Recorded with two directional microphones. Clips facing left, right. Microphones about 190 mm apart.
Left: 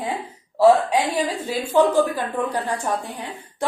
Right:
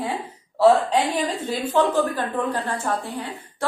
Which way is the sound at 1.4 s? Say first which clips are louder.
Left 4 dB; 10° left (ahead or behind).